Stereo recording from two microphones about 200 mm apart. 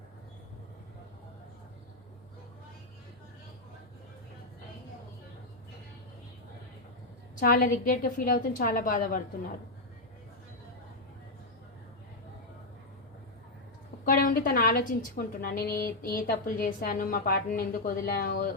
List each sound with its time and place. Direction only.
7.4 s a woman's voice: 45° left (ahead or behind)
14.1 s a woman's voice: 45° left (ahead or behind)